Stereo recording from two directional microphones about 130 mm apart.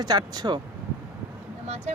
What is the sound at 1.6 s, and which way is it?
Speech, 60° right (ahead or behind).